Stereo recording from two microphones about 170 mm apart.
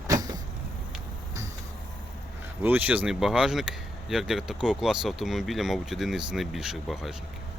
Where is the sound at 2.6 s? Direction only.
10° right (ahead or behind).